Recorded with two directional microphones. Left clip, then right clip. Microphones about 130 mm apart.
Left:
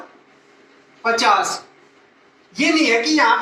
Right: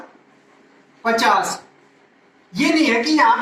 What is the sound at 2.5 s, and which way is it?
Speech, 20° left (ahead or behind).